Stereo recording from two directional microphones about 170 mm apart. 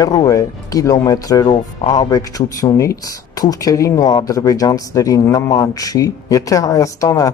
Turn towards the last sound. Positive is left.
turn(degrees=20)  # may be behind; listen again after turning